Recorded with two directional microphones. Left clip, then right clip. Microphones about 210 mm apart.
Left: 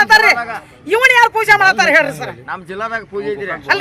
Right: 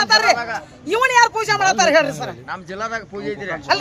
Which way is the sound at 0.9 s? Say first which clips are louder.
Left 4 dB; 5° left (ahead or behind).